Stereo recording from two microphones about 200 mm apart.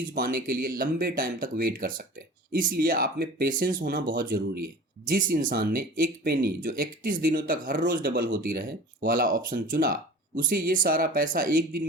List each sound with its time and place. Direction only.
0.1 s speech: 45° right (ahead or behind)